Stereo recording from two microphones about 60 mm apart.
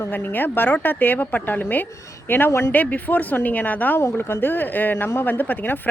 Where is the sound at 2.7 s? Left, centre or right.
Left.